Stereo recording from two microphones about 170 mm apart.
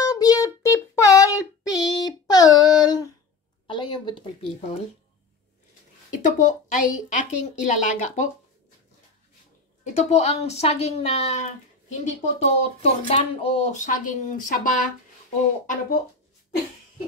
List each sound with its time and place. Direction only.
0.0 s child singing: 20° left (ahead or behind)
3.6 s a sound: 25° left (ahead or behind)
6.2 s speech: 50° left (ahead or behind)
9.8 s speech: 45° left (ahead or behind)